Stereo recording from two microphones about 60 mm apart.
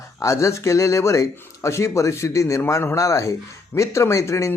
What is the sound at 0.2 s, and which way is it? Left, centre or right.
Speech, left.